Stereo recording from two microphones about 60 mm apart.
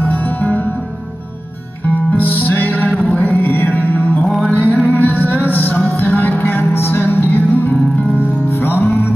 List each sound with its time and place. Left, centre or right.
0.0 s music: left
2.1 s music: left